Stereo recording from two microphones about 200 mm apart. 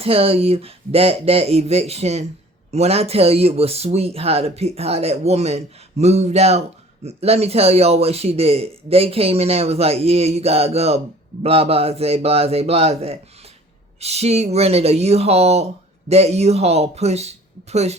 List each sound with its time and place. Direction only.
0.0 s speech: 30° right (ahead or behind)